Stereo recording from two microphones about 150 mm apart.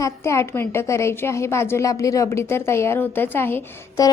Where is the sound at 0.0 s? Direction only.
20° left (ahead or behind).